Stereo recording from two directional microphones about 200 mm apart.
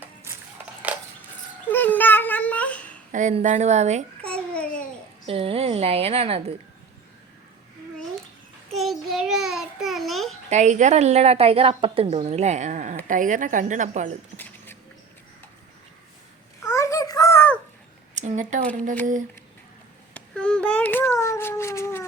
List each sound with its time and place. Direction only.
1.7 s babbling: 10° left (ahead or behind)
3.1 s a woman's voice: 40° right (ahead or behind)
4.2 s babbling: 5° left (ahead or behind)
5.2 s a woman's voice: 30° right (ahead or behind)
8.8 s a child's voice: centre (ahead or behind)
10.5 s a woman's voice: 35° right (ahead or behind)
14.3 s a sound: 10° left (ahead or behind)
16.6 s babbling: 15° left (ahead or behind)
18.1 s a woman's voice: 35° right (ahead or behind)
20.1 s a sound: 5° left (ahead or behind)